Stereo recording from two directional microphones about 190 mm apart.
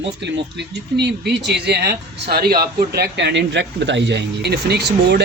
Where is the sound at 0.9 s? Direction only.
60° right (ahead or behind).